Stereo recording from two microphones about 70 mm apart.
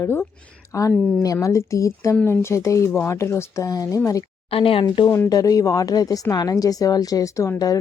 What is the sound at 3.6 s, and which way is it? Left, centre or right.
Speech, left.